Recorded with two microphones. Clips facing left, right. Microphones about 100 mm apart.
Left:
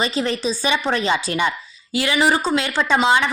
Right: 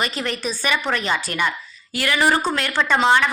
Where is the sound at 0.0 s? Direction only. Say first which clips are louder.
Left 4 dB; 25° left (ahead or behind).